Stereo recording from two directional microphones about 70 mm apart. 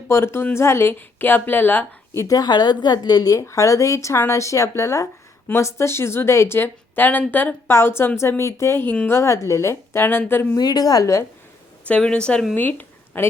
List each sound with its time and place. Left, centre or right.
0.1 s a woman's voice: left
2.2 s a woman's voice: left
3.3 s a woman's voice: left
7.7 s a woman's voice: left
10.6 s a woman's voice: left
11.0 s speech: left
11.9 s speech: centre
12.5 s speech: left